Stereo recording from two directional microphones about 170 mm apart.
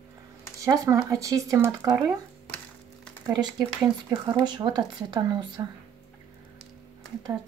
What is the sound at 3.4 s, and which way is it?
Speech, 25° right (ahead or behind).